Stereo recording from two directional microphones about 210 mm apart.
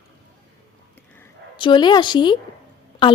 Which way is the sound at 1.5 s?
20° left (ahead or behind).